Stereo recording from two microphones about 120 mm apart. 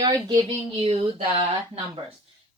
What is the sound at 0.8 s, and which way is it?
Speech, 55° right (ahead or behind).